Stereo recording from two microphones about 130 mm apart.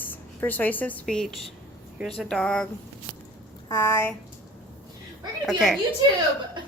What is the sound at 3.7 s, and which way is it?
Speech, 25° left (ahead or behind).